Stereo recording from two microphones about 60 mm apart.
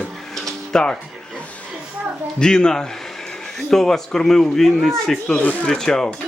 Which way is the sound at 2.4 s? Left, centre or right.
Centre.